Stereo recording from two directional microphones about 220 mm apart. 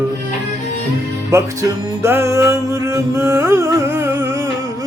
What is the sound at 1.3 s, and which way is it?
Music, 15° right (ahead or behind).